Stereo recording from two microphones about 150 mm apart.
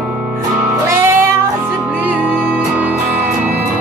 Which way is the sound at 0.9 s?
15° right (ahead or behind).